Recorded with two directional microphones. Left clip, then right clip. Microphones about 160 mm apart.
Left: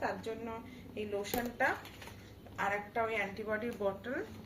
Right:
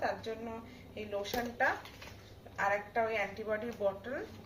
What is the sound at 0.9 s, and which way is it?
A woman's voice, 15° right (ahead or behind).